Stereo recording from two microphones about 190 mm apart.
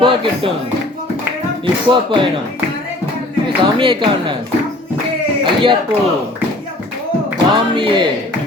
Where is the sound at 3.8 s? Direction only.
25° right (ahead or behind).